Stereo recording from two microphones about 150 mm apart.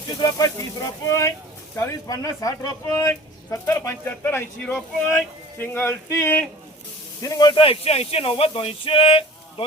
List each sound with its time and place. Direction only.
0.1 s speech: 25° left (ahead or behind)